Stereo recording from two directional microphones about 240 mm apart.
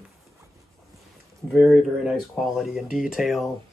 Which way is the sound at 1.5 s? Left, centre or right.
Centre.